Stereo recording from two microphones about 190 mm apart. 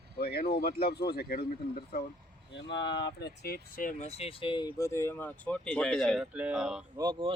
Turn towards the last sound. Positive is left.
turn(degrees=-20)  # may be behind; listen again after turning